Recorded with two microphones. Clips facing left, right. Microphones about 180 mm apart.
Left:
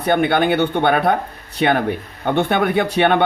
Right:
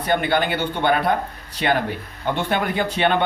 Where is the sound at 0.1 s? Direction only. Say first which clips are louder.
Left 5 dB; 60° left (ahead or behind).